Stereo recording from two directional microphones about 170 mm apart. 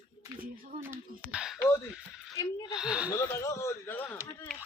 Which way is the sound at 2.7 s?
5° right (ahead or behind).